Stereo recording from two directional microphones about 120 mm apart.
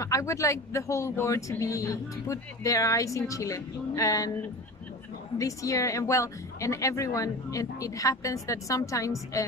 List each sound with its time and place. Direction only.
0.0 s speech: 25° left (ahead or behind)
5.4 s speech: 25° left (ahead or behind)